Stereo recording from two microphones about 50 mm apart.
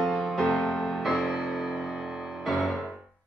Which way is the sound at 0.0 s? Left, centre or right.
Centre.